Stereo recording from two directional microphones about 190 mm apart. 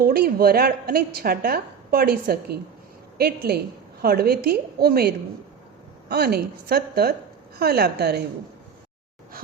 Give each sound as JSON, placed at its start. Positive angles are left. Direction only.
{"t": 0.0, "sound": "a woman's voice", "side_deg": -55}